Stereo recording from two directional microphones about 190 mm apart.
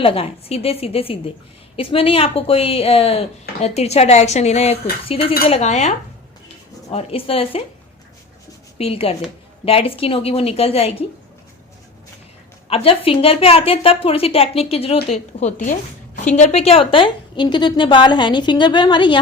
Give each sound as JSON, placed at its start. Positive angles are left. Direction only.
{"t": 0.0, "sound": "a woman's voice", "side_deg": 30}
{"t": 8.8, "sound": "a woman's voice", "side_deg": 30}
{"t": 12.6, "sound": "a woman's voice", "side_deg": 30}